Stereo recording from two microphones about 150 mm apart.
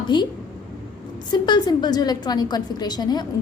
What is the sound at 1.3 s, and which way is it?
A woman's voice, 30° left (ahead or behind).